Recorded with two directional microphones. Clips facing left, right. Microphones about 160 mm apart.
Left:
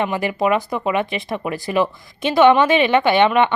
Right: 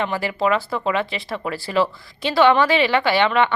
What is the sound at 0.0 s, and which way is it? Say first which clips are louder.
Speech: left 2 dB; 20° left (ahead or behind).